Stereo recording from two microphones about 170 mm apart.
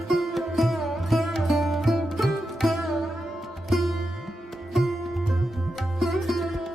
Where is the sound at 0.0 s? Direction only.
Centre (ahead or behind).